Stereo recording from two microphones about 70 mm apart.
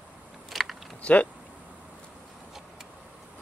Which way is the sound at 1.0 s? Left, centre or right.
Centre.